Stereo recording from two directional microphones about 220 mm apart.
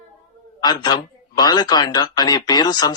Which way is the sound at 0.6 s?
20° left (ahead or behind).